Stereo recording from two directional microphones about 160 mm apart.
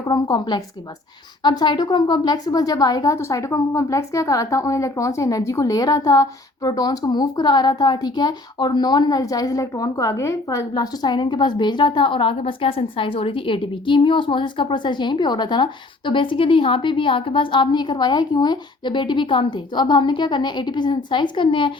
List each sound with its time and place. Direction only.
0.1 s a woman's voice: 25° left (ahead or behind)